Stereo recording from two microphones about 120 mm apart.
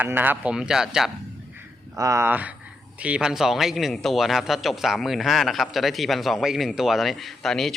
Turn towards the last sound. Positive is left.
turn(degrees=5)  # may be behind; listen again after turning